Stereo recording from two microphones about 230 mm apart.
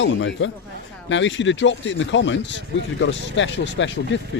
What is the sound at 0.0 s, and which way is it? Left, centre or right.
Speech, left.